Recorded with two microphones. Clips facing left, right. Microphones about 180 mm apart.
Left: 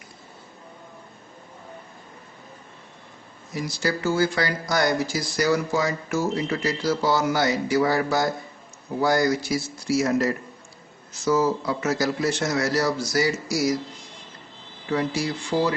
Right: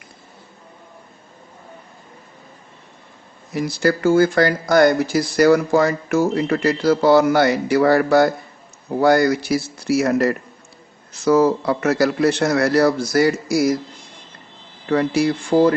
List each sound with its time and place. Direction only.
3.5 s speech: 55° right (ahead or behind)
14.8 s speech: 60° right (ahead or behind)